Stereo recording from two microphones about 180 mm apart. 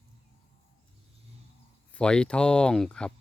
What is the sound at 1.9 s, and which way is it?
Speech, 5° left (ahead or behind).